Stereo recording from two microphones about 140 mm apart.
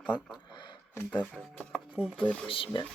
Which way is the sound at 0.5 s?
35° left (ahead or behind).